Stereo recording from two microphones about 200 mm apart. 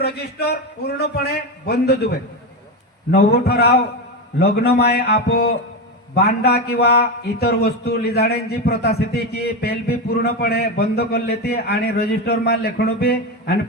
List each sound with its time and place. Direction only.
0.0 s a man's voice: 55° left (ahead or behind)
3.2 s a man's voice: 50° left (ahead or behind)